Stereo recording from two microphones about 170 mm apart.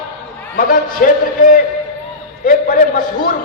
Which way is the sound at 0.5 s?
55° left (ahead or behind).